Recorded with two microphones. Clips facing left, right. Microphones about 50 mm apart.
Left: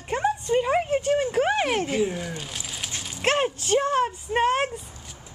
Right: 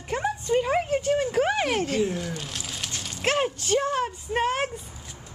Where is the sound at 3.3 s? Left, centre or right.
Centre.